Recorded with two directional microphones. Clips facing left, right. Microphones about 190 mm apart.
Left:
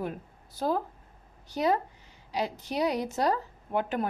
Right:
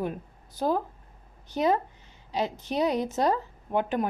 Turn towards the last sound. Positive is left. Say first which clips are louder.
# right 2 dB
turn(degrees=-20)  # may be behind; listen again after turning